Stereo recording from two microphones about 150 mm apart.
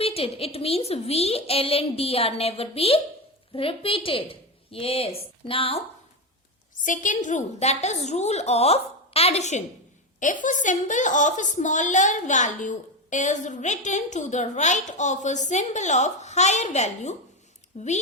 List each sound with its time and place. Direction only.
0.0 s a woman's voice: 40° left (ahead or behind)
6.8 s a woman's voice: 60° left (ahead or behind)